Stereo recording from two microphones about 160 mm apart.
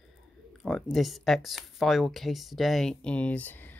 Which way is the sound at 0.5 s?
Centre (ahead or behind).